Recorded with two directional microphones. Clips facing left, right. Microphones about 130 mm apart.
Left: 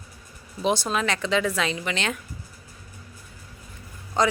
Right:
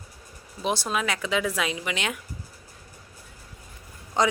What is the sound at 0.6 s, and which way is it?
Speech, centre (ahead or behind).